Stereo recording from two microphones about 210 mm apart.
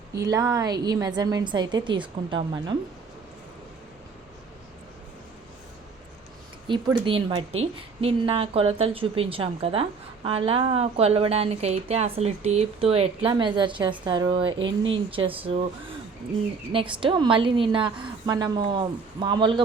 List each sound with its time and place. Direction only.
0.2 s a woman's voice: 15° right (ahead or behind)
6.7 s a woman's voice: 20° right (ahead or behind)
17.0 s a woman's voice: 25° right (ahead or behind)